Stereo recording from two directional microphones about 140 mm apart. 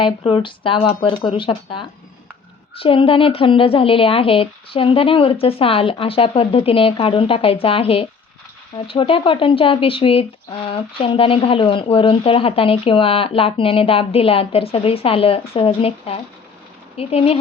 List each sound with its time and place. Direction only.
0.0 s speech: 35° left (ahead or behind)